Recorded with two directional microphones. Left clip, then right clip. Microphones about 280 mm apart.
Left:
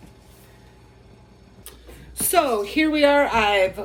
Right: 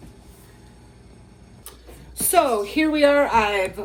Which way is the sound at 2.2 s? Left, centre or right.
Centre.